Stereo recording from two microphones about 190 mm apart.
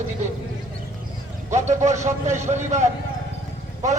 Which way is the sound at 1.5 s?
40° right (ahead or behind).